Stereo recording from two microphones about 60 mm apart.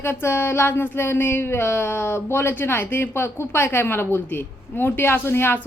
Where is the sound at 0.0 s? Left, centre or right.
Left.